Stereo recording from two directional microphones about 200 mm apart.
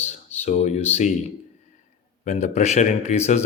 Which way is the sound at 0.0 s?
35° left (ahead or behind).